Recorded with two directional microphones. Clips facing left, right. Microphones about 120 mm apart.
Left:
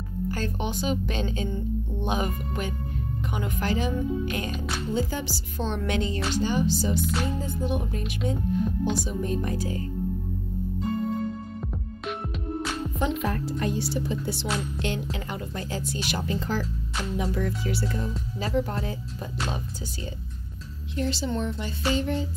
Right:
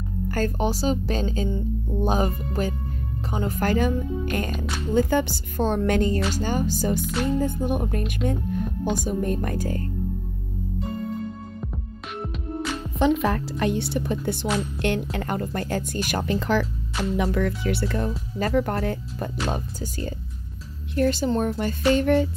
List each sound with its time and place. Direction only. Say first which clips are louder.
0.3 s a woman's voice: right 7 dB; 40° right (ahead or behind)
11.6 s music: left 2 dB; centre (ahead or behind)
13.2 s a woman's voice: right 4 dB; 85° right; by 16.3 s 50° right (ahead or behind)
16.3 s a woman's voice: right 7 dB; 70° right (ahead or behind)